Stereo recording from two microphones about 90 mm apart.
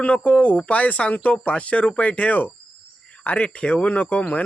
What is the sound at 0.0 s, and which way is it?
Speech, 15° left (ahead or behind).